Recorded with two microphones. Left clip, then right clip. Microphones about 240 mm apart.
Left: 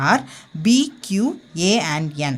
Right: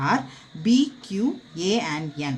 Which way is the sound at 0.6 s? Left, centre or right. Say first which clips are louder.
Left 3 dB; left.